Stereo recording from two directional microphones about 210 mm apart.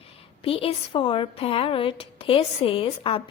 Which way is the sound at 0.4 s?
25° left (ahead or behind).